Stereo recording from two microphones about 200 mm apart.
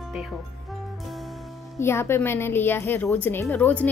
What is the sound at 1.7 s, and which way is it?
A woman's voice, 10° left (ahead or behind).